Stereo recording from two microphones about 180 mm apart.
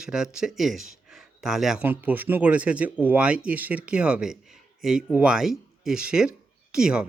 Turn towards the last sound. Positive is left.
turn(degrees=-5)  # may be behind; listen again after turning